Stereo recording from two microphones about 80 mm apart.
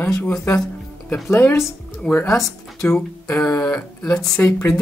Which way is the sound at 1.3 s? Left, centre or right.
Left.